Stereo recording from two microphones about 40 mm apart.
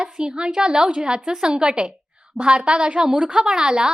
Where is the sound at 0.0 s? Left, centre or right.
Right.